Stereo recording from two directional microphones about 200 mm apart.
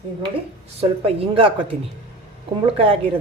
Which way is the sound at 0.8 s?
30° right (ahead or behind).